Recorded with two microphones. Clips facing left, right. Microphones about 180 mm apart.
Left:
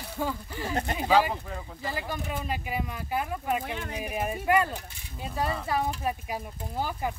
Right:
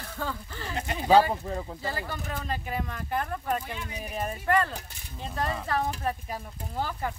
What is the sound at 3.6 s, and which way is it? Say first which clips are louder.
Speech: left 3 dB; 55° left (ahead or behind).